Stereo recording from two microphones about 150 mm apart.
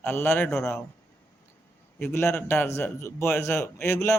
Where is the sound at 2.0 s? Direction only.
15° left (ahead or behind).